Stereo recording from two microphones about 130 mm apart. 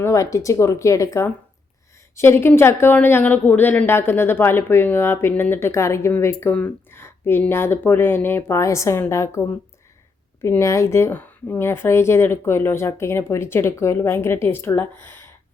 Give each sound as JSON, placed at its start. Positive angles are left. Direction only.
{"t": 0.0, "sound": "speech", "side_deg": 25}